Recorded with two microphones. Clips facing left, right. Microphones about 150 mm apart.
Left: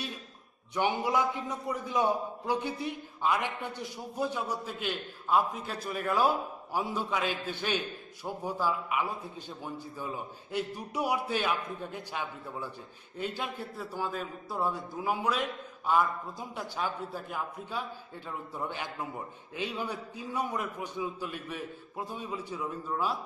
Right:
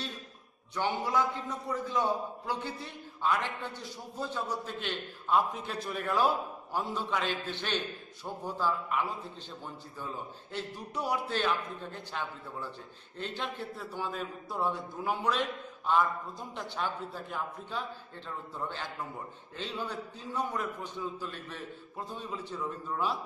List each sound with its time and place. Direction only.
0.7 s a man's voice: 20° left (ahead or behind)
4.6 s a man's voice: 5° left (ahead or behind)